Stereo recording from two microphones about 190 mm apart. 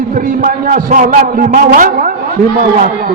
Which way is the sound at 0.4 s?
45° right (ahead or behind).